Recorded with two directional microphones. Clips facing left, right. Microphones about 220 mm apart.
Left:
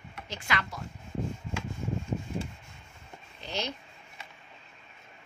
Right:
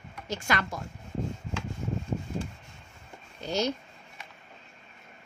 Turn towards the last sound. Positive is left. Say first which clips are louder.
# right 7 dB
turn(degrees=-45)  # may be behind; listen again after turning